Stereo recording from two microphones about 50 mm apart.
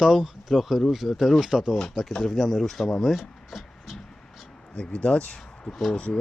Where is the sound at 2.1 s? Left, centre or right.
Centre.